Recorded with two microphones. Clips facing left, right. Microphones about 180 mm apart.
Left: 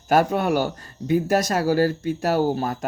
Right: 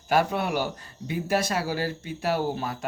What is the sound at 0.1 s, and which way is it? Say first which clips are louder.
Speech: left 5 dB; 45° left (ahead or behind).